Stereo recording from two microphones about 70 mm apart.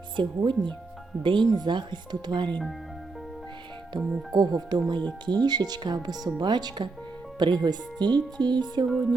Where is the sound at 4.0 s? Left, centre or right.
Right.